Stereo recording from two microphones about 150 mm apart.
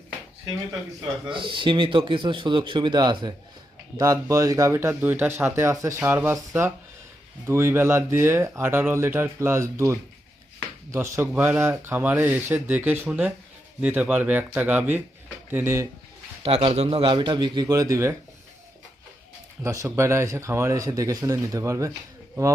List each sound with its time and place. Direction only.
1.3 s speech: 35° right (ahead or behind); by 15.9 s 15° right (ahead or behind)
16.4 s speech: 40° right (ahead or behind); by 18.1 s 20° right (ahead or behind)
19.6 s speech: 20° right (ahead or behind)